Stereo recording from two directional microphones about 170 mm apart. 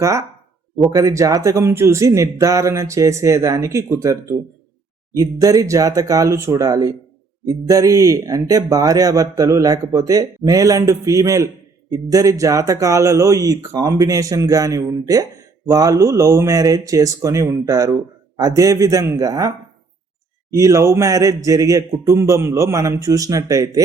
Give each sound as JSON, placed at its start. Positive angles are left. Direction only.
{"t": 0.0, "sound": "speech", "side_deg": -20}